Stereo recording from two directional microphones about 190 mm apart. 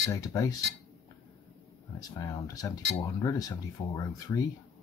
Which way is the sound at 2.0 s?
20° left (ahead or behind).